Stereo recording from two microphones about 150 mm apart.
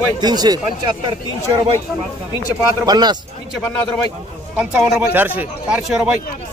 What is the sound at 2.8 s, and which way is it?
Speech, 25° right (ahead or behind).